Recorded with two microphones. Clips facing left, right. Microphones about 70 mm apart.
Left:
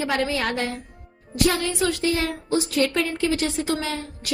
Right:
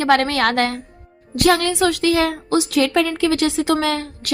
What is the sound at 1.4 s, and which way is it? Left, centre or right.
A woman's voice, right.